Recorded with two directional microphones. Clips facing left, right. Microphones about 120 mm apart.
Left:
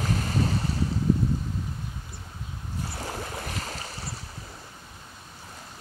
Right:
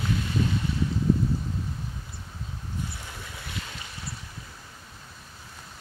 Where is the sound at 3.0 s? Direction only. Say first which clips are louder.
Left 8 dB; 45° left (ahead or behind).